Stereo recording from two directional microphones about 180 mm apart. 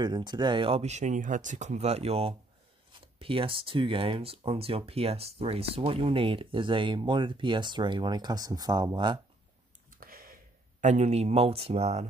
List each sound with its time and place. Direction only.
0.0 s speech: 25° right (ahead or behind)
9.8 s a sound: 50° right (ahead or behind)
10.8 s speech: 40° right (ahead or behind)